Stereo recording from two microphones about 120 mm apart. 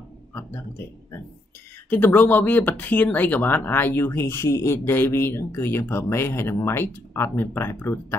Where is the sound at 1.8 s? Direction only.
15° left (ahead or behind).